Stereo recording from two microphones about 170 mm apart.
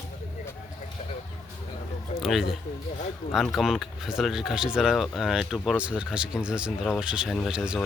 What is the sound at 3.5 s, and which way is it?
Speech, centre (ahead or behind).